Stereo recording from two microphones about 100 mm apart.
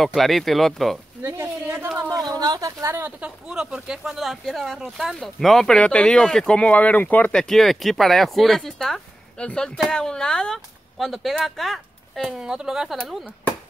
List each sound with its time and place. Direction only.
0.0 s speech: centre (ahead or behind)
1.2 s a woman's voice: 25° right (ahead or behind)
2.0 s a sound: 30° right (ahead or behind)
2.2 s a woman's voice: 45° right (ahead or behind)
2.8 s a woman's voice: 25° right (ahead or behind)
3.2 s speech: 10° right (ahead or behind)